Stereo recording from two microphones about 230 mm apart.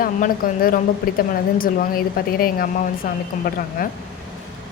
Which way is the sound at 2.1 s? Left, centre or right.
Left.